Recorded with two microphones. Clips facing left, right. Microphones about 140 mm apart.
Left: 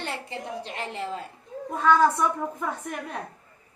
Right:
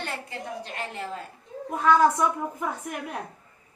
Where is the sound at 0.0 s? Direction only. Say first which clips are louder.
Left 1 dB; 25° left (ahead or behind).